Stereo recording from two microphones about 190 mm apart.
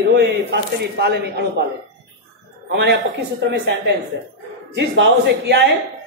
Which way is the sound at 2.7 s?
60° right (ahead or behind).